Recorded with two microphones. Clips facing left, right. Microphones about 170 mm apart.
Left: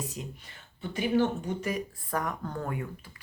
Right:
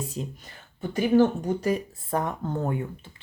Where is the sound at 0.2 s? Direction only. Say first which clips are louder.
Right 6 dB; 30° right (ahead or behind).